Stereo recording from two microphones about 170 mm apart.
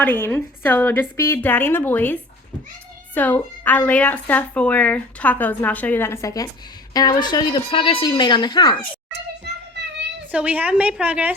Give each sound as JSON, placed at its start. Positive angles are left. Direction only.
{"t": 0.0, "sound": "speech", "side_deg": 10}
{"t": 3.2, "sound": "speech", "side_deg": 10}
{"t": 10.3, "sound": "a woman's voice", "side_deg": -10}